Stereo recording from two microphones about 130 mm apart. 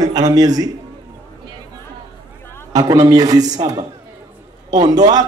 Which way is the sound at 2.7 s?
30° right (ahead or behind).